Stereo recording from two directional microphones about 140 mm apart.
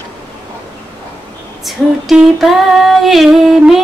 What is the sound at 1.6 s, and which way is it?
Female singing, centre (ahead or behind).